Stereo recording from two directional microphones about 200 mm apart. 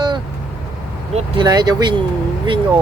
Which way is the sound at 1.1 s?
20° right (ahead or behind).